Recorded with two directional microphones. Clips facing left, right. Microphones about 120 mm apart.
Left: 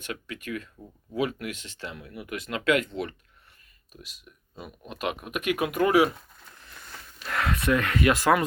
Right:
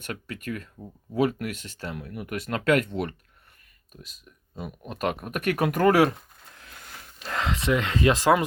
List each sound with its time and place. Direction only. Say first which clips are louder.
0.0 s speech: right 1 dB; 45° right (ahead or behind)
4.9 s speech: right 3 dB; 45° right (ahead or behind)
7.3 s speech: even; 25° right (ahead or behind)